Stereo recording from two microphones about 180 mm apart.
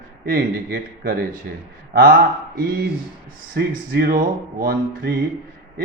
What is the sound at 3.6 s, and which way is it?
Speech, 55° right (ahead or behind).